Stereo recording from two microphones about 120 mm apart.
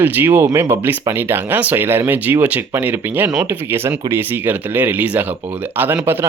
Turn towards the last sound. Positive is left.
turn(degrees=-20)  # may be behind; listen again after turning